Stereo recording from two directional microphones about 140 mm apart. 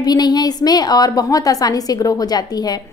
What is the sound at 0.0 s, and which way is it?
A woman's voice, 30° left (ahead or behind).